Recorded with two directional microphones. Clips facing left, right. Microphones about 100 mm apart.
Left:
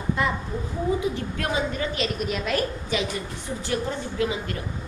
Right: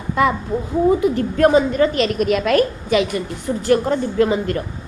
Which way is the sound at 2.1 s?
80° right.